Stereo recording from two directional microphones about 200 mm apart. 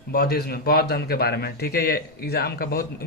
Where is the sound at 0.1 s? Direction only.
50° left (ahead or behind).